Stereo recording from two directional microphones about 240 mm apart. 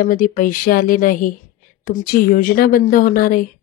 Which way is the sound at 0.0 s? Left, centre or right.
Left.